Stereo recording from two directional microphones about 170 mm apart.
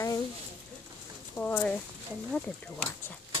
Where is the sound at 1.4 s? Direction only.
10° left (ahead or behind).